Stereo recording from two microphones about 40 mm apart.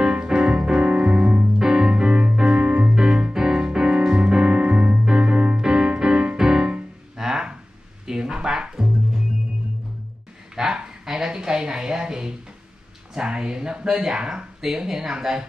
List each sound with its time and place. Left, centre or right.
0.0 s keyboard: right
1.6 s music: centre
4.1 s piano: right
5.0 s music: right
7.2 s a sound: centre
8.1 s music: centre
10.5 s a sound: centre
14.1 s speech: centre